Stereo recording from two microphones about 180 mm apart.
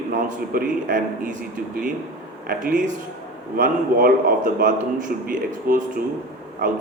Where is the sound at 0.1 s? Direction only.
50° right (ahead or behind).